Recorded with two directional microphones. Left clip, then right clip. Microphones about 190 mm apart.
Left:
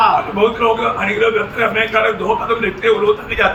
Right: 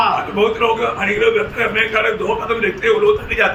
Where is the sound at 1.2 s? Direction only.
15° right (ahead or behind).